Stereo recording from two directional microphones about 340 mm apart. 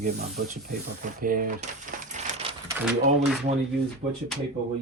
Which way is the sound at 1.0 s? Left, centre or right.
Right.